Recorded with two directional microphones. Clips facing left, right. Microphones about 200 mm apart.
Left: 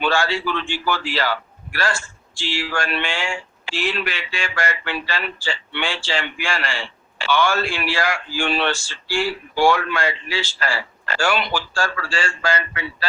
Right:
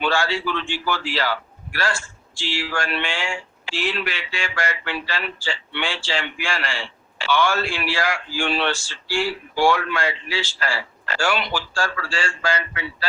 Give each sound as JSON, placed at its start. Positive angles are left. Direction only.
{"t": 0.0, "sound": "a man's voice", "side_deg": 50}